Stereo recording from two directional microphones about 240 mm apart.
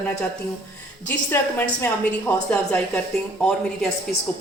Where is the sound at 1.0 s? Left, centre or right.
Centre.